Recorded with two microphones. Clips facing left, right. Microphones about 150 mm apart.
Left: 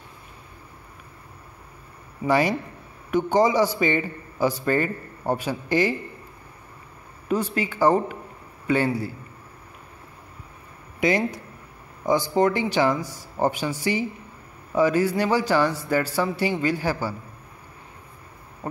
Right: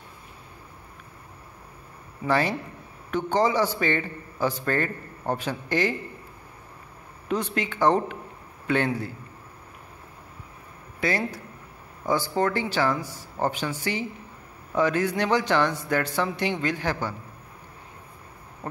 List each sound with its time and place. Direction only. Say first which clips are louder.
2.2 s a man's voice: left 3 dB; 10° left (ahead or behind)
7.2 s a man's voice: left 3 dB; 5° left (ahead or behind)
11.0 s a man's voice: left 5 dB; 15° left (ahead or behind)